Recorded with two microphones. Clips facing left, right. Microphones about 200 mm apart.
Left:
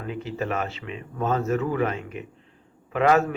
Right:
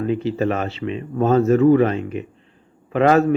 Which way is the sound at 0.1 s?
30° right (ahead or behind).